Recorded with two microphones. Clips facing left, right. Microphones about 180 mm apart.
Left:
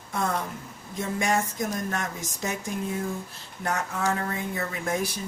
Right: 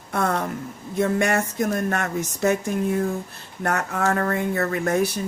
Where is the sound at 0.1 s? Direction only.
70° right (ahead or behind).